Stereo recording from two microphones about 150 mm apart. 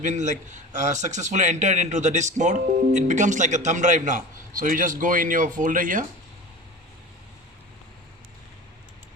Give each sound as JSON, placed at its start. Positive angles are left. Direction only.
{"t": 0.0, "sound": "a man's voice", "side_deg": -55}